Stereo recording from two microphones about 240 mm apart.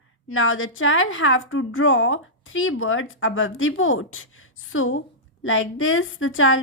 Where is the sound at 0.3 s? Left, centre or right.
Left.